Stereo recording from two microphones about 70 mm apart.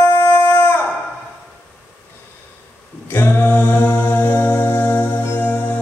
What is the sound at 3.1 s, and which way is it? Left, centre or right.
Music, left.